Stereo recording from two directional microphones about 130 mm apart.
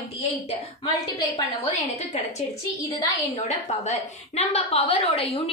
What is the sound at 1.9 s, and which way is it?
A woman's voice, 55° left (ahead or behind).